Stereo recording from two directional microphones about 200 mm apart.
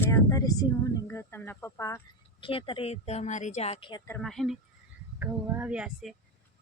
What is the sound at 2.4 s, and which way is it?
Speech, 25° left (ahead or behind).